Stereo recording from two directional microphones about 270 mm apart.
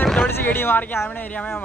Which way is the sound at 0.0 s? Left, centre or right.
Centre.